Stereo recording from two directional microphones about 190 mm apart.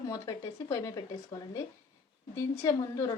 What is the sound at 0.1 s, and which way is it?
Speech, 20° left (ahead or behind).